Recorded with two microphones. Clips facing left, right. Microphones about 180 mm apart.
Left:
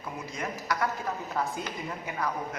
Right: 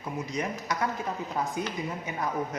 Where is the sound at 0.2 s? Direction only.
20° right (ahead or behind).